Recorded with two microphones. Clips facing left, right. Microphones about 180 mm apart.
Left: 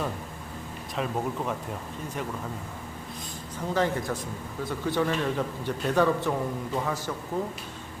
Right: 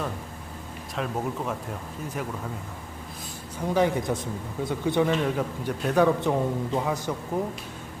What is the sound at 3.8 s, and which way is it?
A man's voice, 15° right (ahead or behind).